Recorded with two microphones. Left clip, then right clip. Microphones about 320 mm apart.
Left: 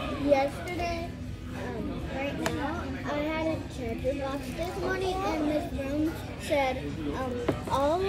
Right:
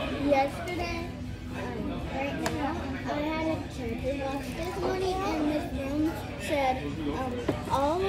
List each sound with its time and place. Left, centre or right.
0.3 s speech: centre
2.2 s a sound: centre
4.3 s speech: centre